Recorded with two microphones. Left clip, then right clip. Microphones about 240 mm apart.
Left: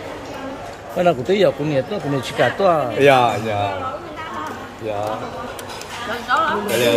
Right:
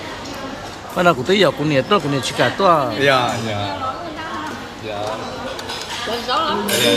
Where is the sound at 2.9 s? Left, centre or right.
Left.